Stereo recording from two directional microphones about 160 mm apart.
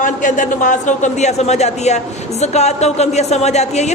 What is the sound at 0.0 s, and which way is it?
A woman's voice, 55° left (ahead or behind).